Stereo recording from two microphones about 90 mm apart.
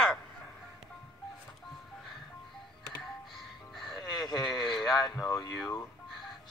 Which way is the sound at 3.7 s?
5° left (ahead or behind).